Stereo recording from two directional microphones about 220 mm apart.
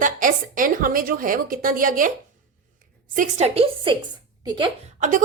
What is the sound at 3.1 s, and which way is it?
Speech, 35° right (ahead or behind).